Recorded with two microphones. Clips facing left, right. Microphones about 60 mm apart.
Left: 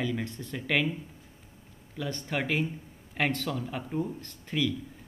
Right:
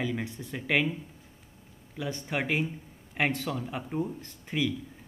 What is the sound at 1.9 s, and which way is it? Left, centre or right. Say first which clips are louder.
Speech: even; centre.